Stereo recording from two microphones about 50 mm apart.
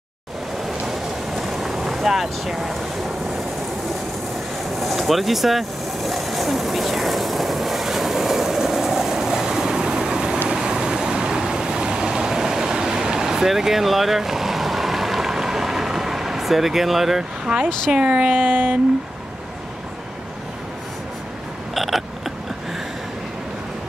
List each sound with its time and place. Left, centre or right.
0.7 s vehicle: centre
4.7 s vehicle: centre
17.5 s speech: centre
18.4 s speech: right
21.7 s a sound: centre